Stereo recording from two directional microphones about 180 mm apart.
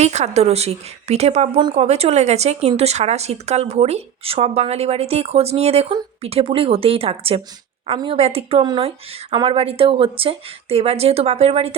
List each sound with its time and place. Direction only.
0.0 s speech: 40° right (ahead or behind)